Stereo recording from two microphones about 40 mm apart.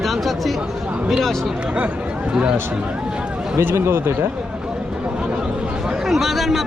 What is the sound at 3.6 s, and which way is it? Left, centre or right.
Speech, right.